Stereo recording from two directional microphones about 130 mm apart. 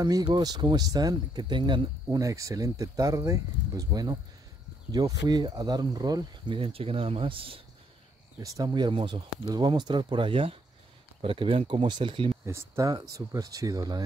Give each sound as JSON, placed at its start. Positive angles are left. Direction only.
{"t": 0.0, "sound": "speech", "side_deg": -30}
{"t": 2.0, "sound": "speech", "side_deg": -25}
{"t": 8.4, "sound": "speech", "side_deg": -30}
{"t": 12.4, "sound": "speech", "side_deg": -25}